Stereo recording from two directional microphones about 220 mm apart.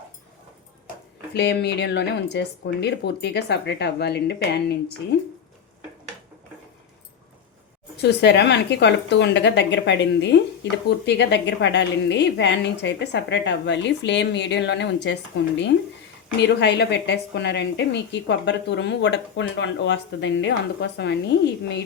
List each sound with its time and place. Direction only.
1.3 s a woman's voice: 50° left (ahead or behind)
7.9 s a woman's voice: 50° left (ahead or behind)